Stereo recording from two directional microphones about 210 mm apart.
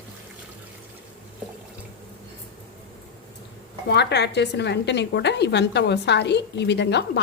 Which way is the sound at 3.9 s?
50° left (ahead or behind).